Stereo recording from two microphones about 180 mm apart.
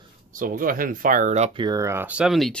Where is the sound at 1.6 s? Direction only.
20° right (ahead or behind); by 2.5 s centre (ahead or behind).